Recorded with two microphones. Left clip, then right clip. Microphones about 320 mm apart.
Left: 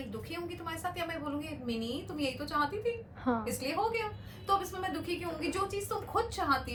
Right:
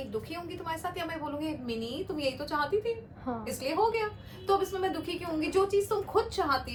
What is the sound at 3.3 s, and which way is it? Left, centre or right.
Speech, left.